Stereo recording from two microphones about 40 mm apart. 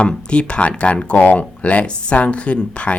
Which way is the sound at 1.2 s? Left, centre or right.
Left.